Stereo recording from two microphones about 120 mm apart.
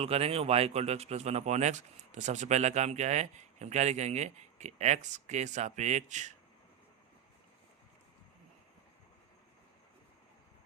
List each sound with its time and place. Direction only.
0.0 s speech: 55° right (ahead or behind); by 6.3 s 90° right